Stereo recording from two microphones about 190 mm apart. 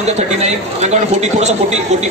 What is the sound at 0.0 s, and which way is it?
A man's voice, 35° right (ahead or behind).